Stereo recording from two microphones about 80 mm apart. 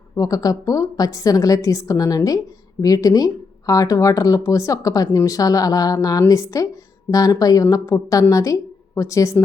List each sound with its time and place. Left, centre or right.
0.2 s a woman's voice: left